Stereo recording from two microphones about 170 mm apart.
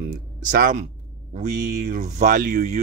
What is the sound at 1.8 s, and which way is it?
Speech, 50° right (ahead or behind).